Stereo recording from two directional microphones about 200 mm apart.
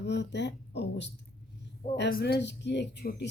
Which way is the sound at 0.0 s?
60° left (ahead or behind).